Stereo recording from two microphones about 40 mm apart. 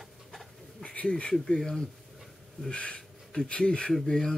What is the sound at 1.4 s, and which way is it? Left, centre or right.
Speech, centre.